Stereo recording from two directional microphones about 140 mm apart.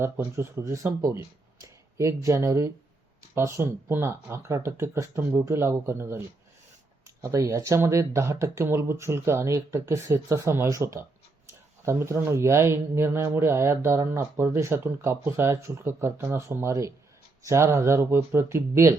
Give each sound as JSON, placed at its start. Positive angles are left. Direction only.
{"t": 0.0, "sound": "speech", "side_deg": -20}